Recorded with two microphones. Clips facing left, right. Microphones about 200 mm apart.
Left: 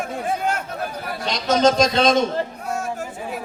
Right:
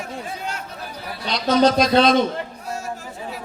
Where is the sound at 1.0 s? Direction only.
45° left (ahead or behind).